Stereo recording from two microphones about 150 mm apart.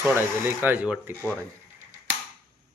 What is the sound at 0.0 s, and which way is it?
Speech, 15° right (ahead or behind).